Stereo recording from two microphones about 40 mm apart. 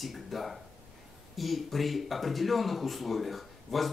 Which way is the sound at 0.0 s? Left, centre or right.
Centre.